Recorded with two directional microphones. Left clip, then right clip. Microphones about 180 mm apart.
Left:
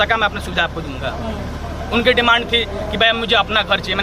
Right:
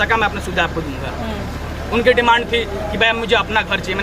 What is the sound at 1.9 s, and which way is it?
A man's voice, 10° right (ahead or behind).